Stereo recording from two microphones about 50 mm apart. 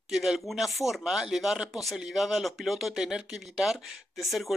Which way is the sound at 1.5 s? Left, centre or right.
Centre.